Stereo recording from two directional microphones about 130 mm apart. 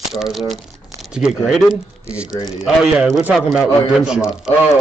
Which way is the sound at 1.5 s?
5° right (ahead or behind).